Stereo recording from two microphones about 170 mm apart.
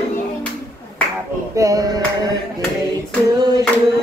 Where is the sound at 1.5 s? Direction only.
20° right (ahead or behind).